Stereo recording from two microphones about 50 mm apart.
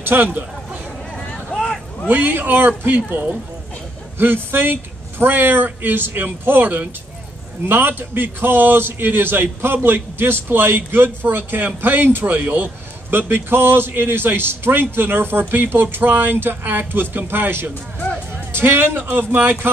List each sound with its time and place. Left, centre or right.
0.0 s a man's voice: right
1.1 s a sound: centre
2.0 s a man's voice: right
12.3 s a man's voice: right